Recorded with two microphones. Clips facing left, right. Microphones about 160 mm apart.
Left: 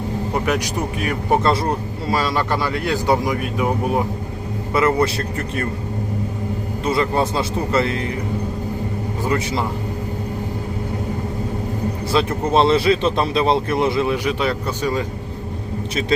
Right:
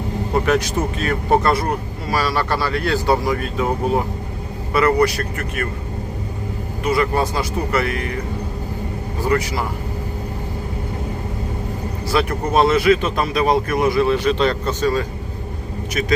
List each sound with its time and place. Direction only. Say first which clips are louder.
0.3 s speech: right 4 dB; 15° left (ahead or behind)
4.7 s speech: right 2 dB; 20° left (ahead or behind)
6.8 s speech: right 1 dB; 25° left (ahead or behind)
9.2 s speech: right 2 dB; 20° left (ahead or behind)
12.1 s speech: even; 25° left (ahead or behind)